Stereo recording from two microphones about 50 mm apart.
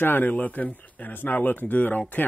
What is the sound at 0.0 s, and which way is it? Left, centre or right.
Speech, left.